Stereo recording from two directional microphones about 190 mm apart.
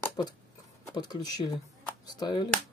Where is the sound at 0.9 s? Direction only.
20° left (ahead or behind).